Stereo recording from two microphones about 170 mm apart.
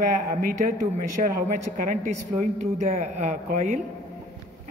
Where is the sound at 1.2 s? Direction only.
55° right (ahead or behind).